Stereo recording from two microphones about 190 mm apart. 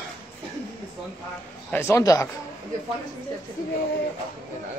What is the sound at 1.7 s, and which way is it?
Speech, 15° left (ahead or behind).